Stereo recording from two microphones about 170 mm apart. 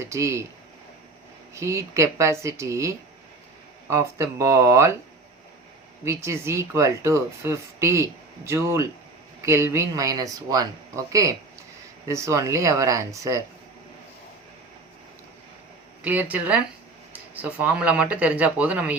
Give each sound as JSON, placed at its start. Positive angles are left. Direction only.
{"t": 0.0, "sound": "speech", "side_deg": -15}
{"t": 1.5, "sound": "speech", "side_deg": -15}
{"t": 6.1, "sound": "speech", "side_deg": -15}
{"t": 16.0, "sound": "speech", "side_deg": -10}